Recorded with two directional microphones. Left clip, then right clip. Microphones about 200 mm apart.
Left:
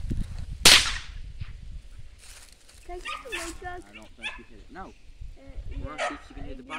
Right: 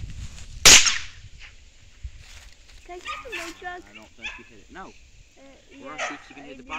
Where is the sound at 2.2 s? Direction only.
45° left (ahead or behind).